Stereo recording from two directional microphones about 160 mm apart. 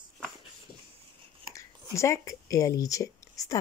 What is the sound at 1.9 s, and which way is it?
Speech, 20° left (ahead or behind).